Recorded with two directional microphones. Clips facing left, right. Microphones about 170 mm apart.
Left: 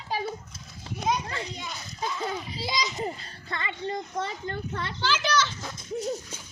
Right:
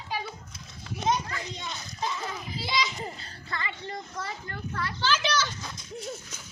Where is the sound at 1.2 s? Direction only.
30° left (ahead or behind).